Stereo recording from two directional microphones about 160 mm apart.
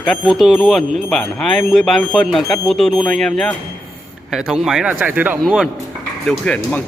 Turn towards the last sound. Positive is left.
turn(degrees=5)  # may be behind; listen again after turning